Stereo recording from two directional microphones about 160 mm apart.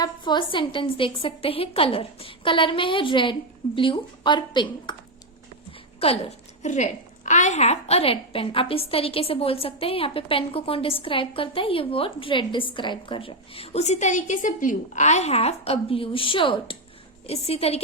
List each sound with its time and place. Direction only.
0.0 s a woman's voice: 30° left (ahead or behind)
6.0 s a woman's voice: 40° left (ahead or behind)